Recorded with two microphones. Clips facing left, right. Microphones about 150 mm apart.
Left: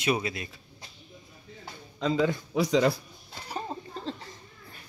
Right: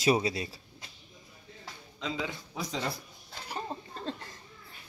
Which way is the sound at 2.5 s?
75° left (ahead or behind).